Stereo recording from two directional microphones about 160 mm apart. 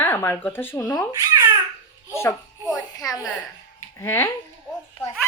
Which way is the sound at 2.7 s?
25° left (ahead or behind).